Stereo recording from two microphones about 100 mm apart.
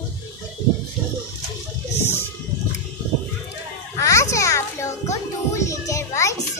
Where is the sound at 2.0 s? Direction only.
20° left (ahead or behind).